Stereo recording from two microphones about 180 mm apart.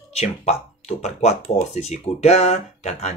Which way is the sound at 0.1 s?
35° left (ahead or behind).